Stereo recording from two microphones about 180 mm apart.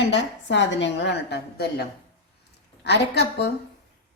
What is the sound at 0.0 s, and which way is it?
A woman's voice, 80° left.